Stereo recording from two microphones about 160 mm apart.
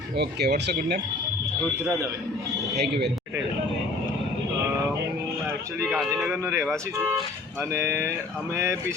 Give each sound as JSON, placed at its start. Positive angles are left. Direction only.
{"t": 0.2, "sound": "speech", "side_deg": -90}
{"t": 6.4, "sound": "speech", "side_deg": -15}
{"t": 7.7, "sound": "speech", "side_deg": -15}